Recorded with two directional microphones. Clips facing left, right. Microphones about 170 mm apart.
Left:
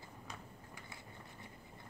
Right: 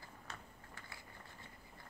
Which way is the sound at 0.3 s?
15° left (ahead or behind).